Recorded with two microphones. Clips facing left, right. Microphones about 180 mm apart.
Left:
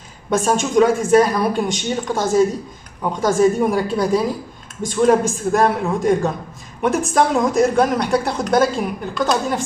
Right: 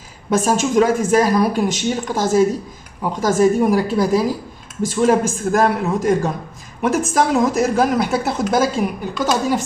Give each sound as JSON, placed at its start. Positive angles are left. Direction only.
{"t": 0.3, "sound": "speech", "side_deg": 0}